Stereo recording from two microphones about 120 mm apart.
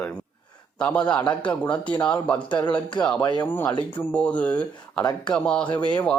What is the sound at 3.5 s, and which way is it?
A man's voice, 15° left (ahead or behind).